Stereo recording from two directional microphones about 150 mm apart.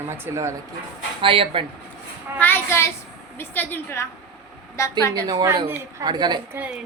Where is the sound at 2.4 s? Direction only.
15° left (ahead or behind).